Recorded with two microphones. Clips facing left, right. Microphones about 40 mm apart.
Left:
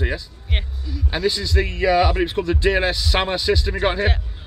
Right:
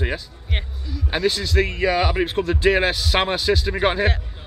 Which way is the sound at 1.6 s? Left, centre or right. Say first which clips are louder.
Left 5 dB; centre.